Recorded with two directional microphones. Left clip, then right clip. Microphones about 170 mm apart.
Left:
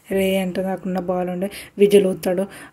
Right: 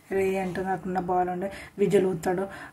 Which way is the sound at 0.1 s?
25° left (ahead or behind).